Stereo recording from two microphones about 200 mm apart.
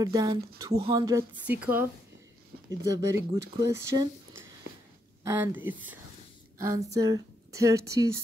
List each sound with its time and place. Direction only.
0.0 s speech: 20° right (ahead or behind)